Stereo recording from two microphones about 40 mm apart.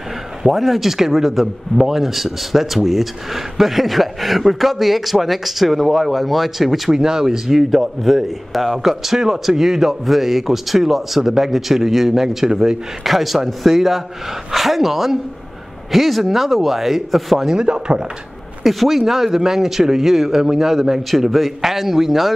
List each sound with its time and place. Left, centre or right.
0.4 s speech: centre
7.0 s speech: centre
13.0 s speech: centre
17.5 s chopping: right
18.6 s speech: centre